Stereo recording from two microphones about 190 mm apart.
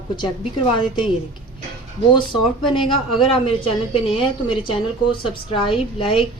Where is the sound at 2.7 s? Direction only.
25° left (ahead or behind).